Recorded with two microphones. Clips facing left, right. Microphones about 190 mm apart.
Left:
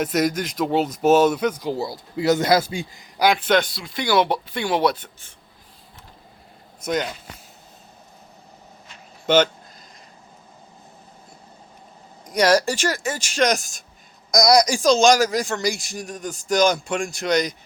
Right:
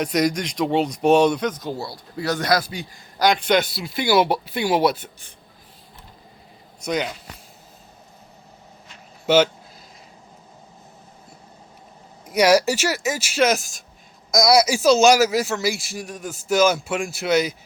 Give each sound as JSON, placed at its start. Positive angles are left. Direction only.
{"t": 0.0, "sound": "a man's voice", "side_deg": 5}
{"t": 3.2, "sound": "speech", "side_deg": 5}
{"t": 3.6, "sound": "speech", "side_deg": -5}
{"t": 6.8, "sound": "speech", "side_deg": 0}
{"t": 9.2, "sound": "speech", "side_deg": -10}
{"t": 12.2, "sound": "speech", "side_deg": -10}